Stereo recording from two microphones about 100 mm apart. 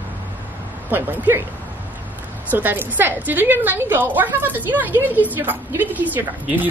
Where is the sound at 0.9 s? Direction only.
20° right (ahead or behind).